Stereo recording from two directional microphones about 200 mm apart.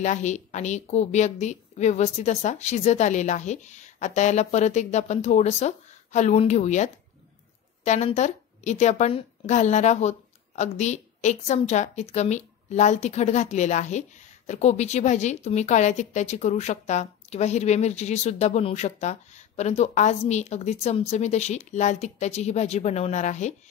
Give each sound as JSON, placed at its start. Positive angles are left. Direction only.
{"t": 0.0, "sound": "a woman's voice", "side_deg": 35}